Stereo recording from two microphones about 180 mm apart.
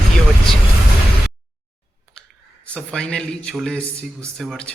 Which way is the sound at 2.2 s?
5° left (ahead or behind).